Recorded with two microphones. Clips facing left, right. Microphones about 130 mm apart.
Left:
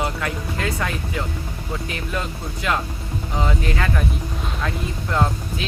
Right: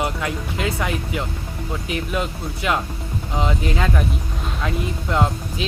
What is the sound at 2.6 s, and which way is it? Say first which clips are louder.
Speech: right 1 dB; 15° right (ahead or behind).